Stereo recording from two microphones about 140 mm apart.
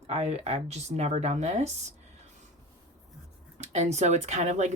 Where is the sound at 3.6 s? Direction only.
55° right (ahead or behind).